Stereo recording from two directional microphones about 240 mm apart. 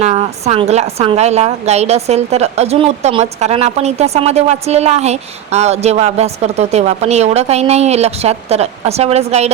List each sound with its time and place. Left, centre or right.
0.0 s a woman's voice: right